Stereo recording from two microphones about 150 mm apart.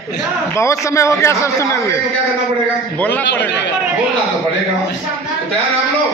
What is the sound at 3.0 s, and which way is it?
Speech, 10° left (ahead or behind).